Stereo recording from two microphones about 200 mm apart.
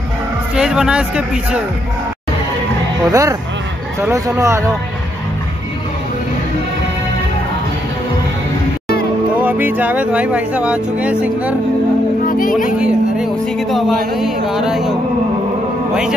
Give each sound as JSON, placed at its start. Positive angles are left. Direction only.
{"t": 0.6, "sound": "speech", "side_deg": -5}
{"t": 3.1, "sound": "speech", "side_deg": -15}
{"t": 9.4, "sound": "speech", "side_deg": -10}
{"t": 12.3, "sound": "music", "side_deg": 45}
{"t": 12.7, "sound": "speech", "side_deg": -5}